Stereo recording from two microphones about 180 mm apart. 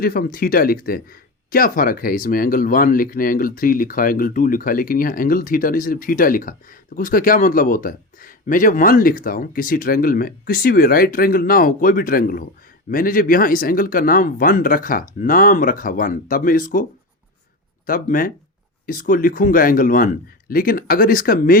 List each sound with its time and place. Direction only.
0.0 s speech: 55° left (ahead or behind)
17.8 s speech: 50° left (ahead or behind)